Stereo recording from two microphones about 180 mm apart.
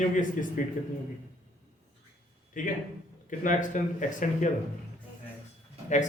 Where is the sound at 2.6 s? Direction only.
45° left (ahead or behind).